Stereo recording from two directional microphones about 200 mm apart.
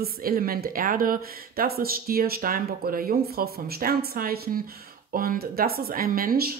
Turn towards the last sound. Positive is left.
turn(degrees=-45)  # may be behind; listen again after turning